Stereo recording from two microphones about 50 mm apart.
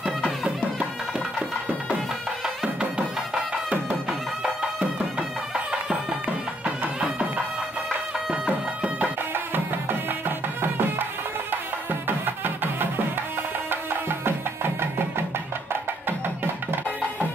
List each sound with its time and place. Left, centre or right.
5.5 s music: centre
7.0 s music: right
8.5 s music: right
9.3 s music: right